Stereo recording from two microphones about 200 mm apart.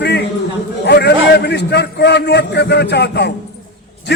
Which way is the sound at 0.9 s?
55° left (ahead or behind).